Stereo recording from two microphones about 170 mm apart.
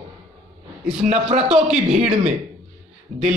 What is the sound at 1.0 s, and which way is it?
Speech, 35° right (ahead or behind).